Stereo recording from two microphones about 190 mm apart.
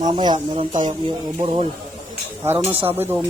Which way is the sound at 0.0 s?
25° right (ahead or behind).